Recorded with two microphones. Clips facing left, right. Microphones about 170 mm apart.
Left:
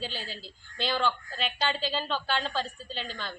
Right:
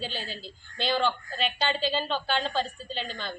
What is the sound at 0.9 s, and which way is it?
Speech, 30° right (ahead or behind).